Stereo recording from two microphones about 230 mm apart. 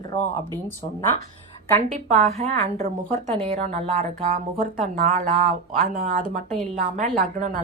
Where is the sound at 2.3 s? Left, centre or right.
Right.